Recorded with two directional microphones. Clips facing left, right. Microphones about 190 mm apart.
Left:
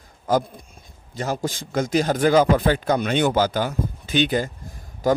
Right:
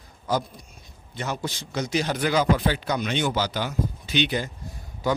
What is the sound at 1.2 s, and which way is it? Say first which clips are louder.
Speech: left 5 dB; 40° left (ahead or behind).